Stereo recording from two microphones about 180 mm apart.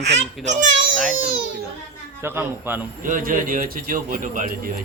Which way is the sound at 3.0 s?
50° right (ahead or behind).